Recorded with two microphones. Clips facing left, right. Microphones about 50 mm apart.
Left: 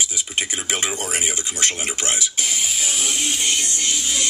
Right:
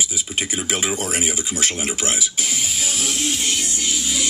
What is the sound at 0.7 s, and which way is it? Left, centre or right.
Music, centre.